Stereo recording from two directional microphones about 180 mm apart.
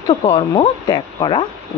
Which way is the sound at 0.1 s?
30° left (ahead or behind).